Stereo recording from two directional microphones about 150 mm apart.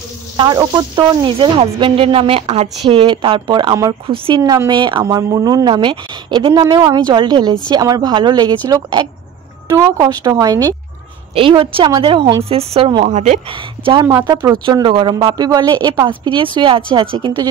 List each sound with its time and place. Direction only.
0.4 s a woman's voice: 25° right (ahead or behind)
11.3 s speech: 35° right (ahead or behind)
13.5 s speech: 35° right (ahead or behind)
14.0 s a woman's voice: 25° right (ahead or behind)